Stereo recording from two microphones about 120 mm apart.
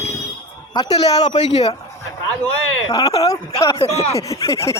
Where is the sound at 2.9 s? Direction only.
30° left (ahead or behind).